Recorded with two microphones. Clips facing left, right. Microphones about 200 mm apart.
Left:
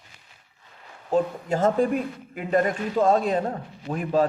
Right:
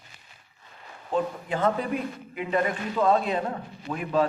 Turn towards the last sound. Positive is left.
turn(degrees=40)  # may be behind; listen again after turning